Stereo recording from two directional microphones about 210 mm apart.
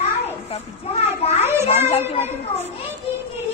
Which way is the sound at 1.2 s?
30° left (ahead or behind).